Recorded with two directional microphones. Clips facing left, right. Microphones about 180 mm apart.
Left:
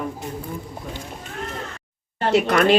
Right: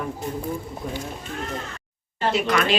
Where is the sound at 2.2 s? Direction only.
60° left (ahead or behind).